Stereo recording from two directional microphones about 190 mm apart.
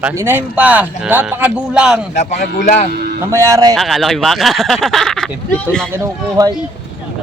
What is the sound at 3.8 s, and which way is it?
Speech, centre (ahead or behind).